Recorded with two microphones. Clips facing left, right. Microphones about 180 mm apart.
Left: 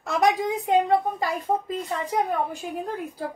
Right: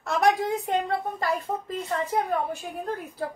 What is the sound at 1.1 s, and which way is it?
Speech, 10° left (ahead or behind).